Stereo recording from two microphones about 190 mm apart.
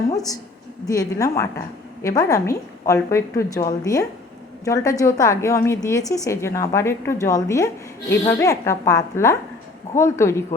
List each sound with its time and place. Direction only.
0.1 s a woman's voice: 20° left (ahead or behind)